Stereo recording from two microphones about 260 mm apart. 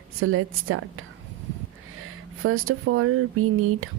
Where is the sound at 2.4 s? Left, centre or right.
Right.